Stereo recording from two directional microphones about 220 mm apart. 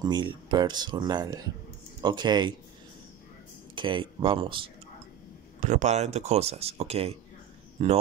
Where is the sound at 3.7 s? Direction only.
20° right (ahead or behind).